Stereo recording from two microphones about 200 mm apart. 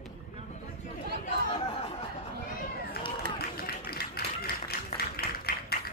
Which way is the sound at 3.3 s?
50° left (ahead or behind).